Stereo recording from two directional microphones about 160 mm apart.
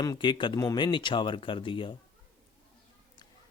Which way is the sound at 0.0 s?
25° left (ahead or behind).